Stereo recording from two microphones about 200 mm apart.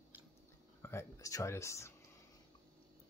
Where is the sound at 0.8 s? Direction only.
15° left (ahead or behind).